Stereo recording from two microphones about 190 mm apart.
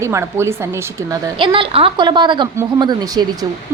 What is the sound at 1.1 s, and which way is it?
A woman's voice, 25° right (ahead or behind).